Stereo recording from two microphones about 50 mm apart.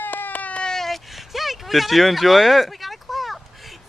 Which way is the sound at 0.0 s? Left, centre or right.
Left.